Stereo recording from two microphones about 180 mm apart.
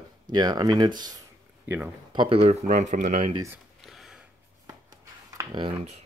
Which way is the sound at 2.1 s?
30° right (ahead or behind).